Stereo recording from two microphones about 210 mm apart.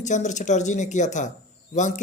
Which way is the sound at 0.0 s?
35° left (ahead or behind).